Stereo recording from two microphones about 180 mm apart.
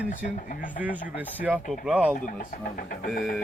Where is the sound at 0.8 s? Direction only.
10° right (ahead or behind).